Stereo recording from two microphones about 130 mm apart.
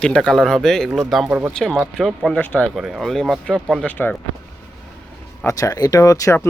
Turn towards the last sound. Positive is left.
turn(degrees=25)  # may be behind; listen again after turning